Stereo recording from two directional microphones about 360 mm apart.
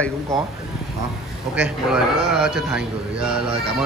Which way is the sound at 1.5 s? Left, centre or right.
Centre.